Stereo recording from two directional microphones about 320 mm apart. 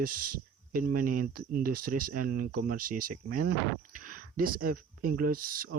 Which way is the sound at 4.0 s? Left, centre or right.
Right.